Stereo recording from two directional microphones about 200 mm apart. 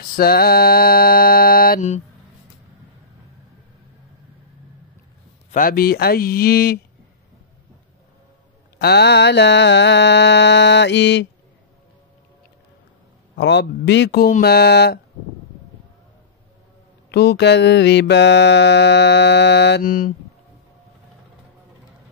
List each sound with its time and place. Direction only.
0.1 s mantra: 50° left (ahead or behind)
5.5 s speech: 45° left (ahead or behind)
8.7 s mantra: 55° left (ahead or behind)
13.4 s speech: 60° left (ahead or behind)
17.1 s mantra: 55° left (ahead or behind)